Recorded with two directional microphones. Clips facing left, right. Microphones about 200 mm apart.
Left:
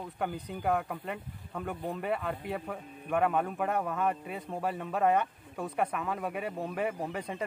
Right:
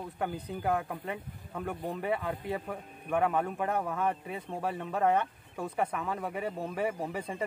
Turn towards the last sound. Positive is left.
turn(degrees=0)  # may be behind; listen again after turning